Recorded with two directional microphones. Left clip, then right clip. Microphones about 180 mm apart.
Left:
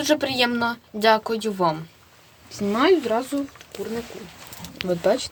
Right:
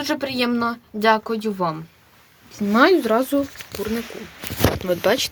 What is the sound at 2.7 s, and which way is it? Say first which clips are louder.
Speech: right 4 dB; 70° right (ahead or behind).